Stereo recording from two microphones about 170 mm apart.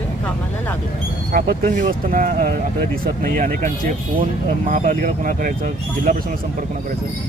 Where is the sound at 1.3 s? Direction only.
60° right (ahead or behind).